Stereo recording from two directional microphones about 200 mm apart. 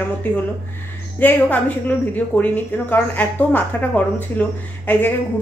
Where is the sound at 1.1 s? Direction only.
10° left (ahead or behind).